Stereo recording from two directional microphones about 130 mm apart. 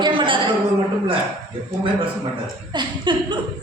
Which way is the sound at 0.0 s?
40° right (ahead or behind).